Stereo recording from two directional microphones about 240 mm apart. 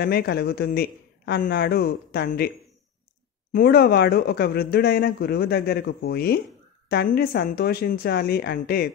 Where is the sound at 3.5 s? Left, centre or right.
Left.